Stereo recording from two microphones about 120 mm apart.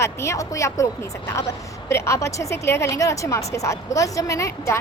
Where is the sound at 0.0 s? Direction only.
25° left (ahead or behind).